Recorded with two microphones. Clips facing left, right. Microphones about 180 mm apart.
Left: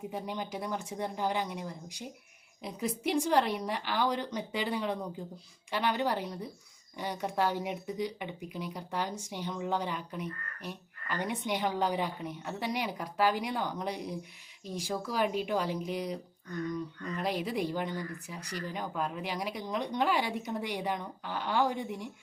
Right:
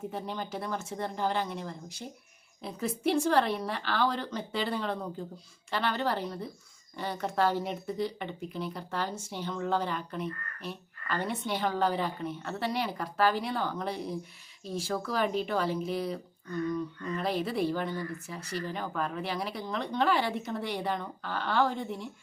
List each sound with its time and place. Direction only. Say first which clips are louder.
0.1 s speech: right 1 dB; 15° left (ahead or behind)